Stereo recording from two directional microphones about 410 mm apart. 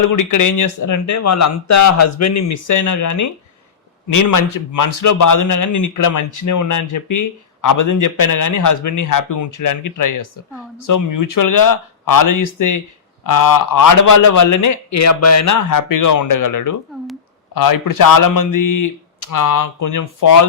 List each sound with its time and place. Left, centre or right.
0.1 s a man's voice: left